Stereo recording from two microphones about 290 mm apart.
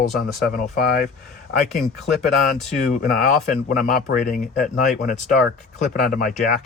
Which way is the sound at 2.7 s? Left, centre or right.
Left.